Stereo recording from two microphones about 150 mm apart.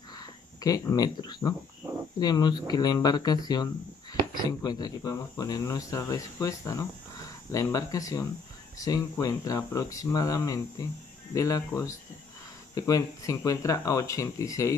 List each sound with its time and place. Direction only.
0.6 s speech: 25° left (ahead or behind)